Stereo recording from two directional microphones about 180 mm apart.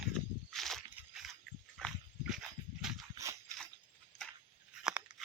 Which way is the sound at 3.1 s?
15° right (ahead or behind).